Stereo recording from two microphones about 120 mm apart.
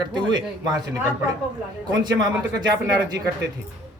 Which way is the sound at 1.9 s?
35° right (ahead or behind).